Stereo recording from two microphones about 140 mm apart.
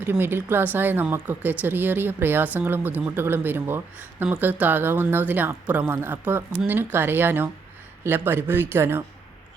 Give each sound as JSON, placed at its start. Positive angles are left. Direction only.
{"t": 0.0, "sound": "speech", "side_deg": -15}